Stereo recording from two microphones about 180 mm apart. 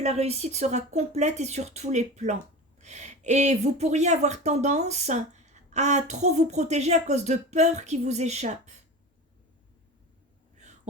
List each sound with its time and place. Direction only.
0.0 s speech: 35° right (ahead or behind)